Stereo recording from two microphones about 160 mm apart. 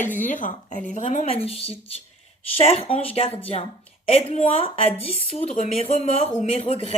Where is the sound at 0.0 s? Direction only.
55° left (ahead or behind).